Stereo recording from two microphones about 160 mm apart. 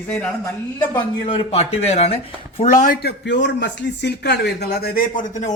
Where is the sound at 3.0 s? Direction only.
90° left.